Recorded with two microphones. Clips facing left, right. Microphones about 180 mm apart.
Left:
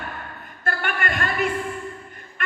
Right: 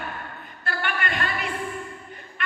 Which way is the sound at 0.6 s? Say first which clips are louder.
Left 2 dB; 45° left (ahead or behind).